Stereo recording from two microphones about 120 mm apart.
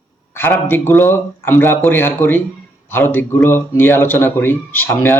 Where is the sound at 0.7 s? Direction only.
20° left (ahead or behind).